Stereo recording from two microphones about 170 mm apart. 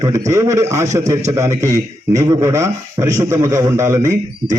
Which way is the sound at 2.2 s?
20° right (ahead or behind).